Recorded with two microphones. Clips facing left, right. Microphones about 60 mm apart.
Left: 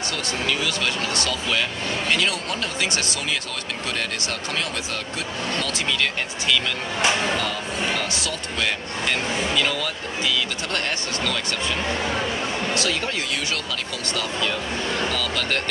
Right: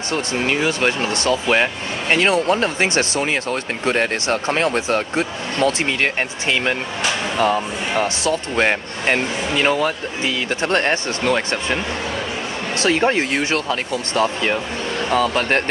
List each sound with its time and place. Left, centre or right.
0.1 s speech: right
15.1 s speech: right